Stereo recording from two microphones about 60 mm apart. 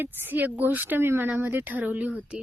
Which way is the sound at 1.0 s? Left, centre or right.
Right.